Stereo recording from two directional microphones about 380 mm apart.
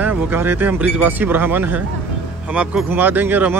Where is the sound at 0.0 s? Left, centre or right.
Centre.